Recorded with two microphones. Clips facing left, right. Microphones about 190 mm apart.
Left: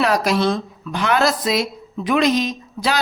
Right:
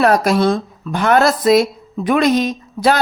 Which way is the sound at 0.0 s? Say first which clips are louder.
Right 4 dB; 50° right (ahead or behind).